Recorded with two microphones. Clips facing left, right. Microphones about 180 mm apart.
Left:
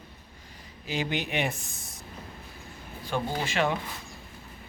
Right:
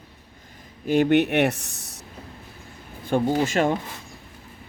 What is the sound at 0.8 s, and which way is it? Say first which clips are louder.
Speech: right 13 dB; 60° right (ahead or behind).